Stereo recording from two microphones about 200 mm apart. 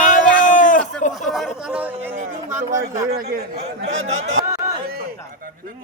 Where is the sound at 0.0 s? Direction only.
40° left (ahead or behind).